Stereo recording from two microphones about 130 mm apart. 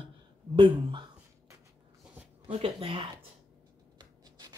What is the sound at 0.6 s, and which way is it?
Speech, 40° right (ahead or behind).